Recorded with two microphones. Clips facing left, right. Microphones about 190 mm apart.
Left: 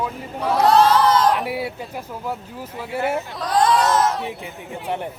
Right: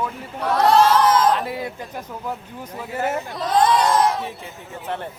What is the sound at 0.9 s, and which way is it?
Crowd, 5° right (ahead or behind).